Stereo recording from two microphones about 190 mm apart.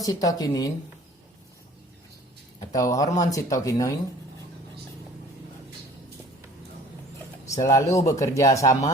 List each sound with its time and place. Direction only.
0.0 s speech: 20° left (ahead or behind)
2.7 s speech: 20° left (ahead or behind)
7.6 s speech: 15° left (ahead or behind)